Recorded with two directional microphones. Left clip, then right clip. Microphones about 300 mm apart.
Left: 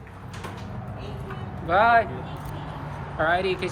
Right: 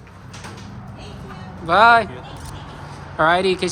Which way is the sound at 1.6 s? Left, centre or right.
Centre.